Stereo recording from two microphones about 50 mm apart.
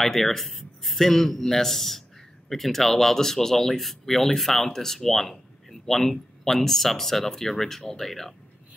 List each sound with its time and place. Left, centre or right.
0.0 s speech: centre